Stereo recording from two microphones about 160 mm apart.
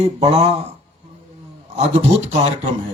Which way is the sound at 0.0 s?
40° right (ahead or behind).